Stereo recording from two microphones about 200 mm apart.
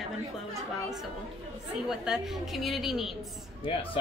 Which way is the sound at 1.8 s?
Centre (ahead or behind).